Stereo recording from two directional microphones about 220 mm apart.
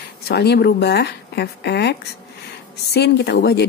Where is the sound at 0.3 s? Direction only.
45° left (ahead or behind).